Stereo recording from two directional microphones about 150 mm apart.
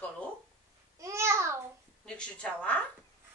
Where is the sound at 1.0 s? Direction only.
20° right (ahead or behind).